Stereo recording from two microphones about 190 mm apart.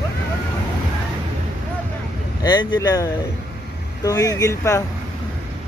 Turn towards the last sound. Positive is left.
turn(degrees=15)  # may be behind; listen again after turning